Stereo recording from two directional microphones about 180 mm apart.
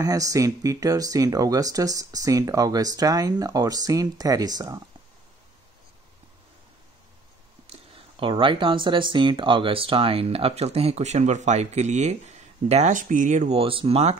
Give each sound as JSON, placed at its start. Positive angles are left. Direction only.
{"t": 0.0, "sound": "speech", "side_deg": -20}
{"t": 7.6, "sound": "speech", "side_deg": -30}